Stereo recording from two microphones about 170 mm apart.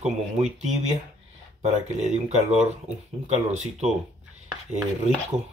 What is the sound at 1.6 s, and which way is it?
Speech, 40° right (ahead or behind).